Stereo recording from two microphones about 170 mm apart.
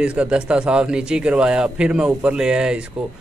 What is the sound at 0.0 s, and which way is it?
A man's voice, 5° right (ahead or behind).